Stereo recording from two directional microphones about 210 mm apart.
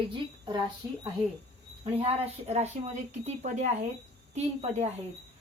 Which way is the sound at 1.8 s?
25° right (ahead or behind).